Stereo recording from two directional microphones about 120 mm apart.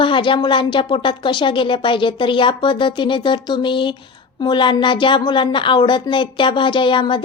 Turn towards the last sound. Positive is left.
turn(degrees=45)  # may be behind; listen again after turning